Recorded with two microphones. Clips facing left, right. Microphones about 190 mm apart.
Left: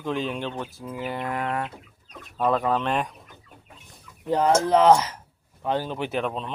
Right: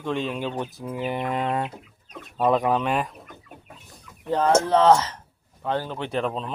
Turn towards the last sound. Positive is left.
turn(degrees=0)  # may be behind; listen again after turning